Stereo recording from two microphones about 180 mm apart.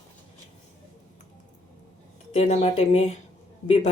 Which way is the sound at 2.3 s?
40° left (ahead or behind).